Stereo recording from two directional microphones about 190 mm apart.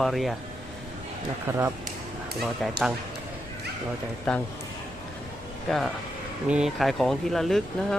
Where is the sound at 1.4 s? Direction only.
10° right (ahead or behind).